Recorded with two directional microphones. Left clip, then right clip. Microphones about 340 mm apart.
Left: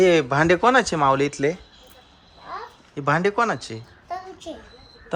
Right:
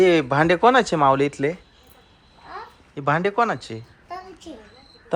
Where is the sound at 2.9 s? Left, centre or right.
Centre.